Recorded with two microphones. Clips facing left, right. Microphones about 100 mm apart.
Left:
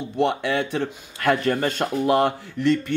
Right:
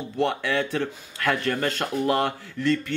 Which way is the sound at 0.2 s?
15° left (ahead or behind).